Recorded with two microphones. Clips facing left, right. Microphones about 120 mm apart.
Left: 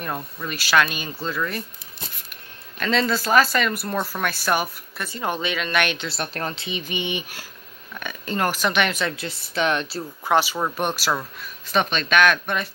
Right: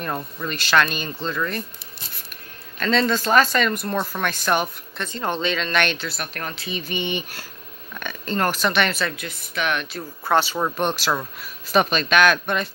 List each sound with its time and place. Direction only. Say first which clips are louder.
0.0 s speech: right 2 dB; 5° left (ahead or behind)
2.8 s speech: right 2 dB; 10° left (ahead or behind)
6.0 s speech: left 2 dB; 30° left (ahead or behind)
9.1 s speech: left 2 dB; 30° left (ahead or behind)
10.2 s speech: right 1 dB; 10° left (ahead or behind)
11.7 s speech: right 2 dB; 5° right (ahead or behind)